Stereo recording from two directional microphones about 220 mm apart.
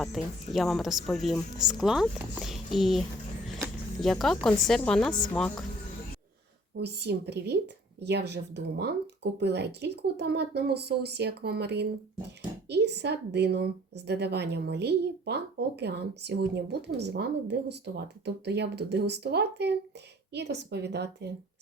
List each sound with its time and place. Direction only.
0.0 s speech: centre (ahead or behind)
4.0 s speech: centre (ahead or behind)
6.7 s a woman's voice: 50° right (ahead or behind)